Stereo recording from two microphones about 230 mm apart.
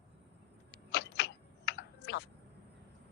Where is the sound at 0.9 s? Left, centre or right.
Left.